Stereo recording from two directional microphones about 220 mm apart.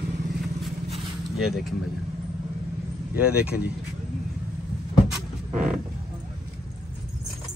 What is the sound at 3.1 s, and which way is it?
Speech, 5° right (ahead or behind).